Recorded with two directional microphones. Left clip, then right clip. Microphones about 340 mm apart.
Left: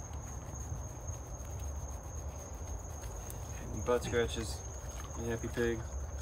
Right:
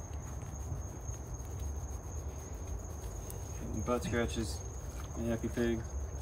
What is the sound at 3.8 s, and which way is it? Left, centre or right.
Speech, centre.